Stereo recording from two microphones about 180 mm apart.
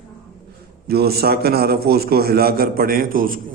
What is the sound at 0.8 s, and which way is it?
A man's voice, 60° right (ahead or behind).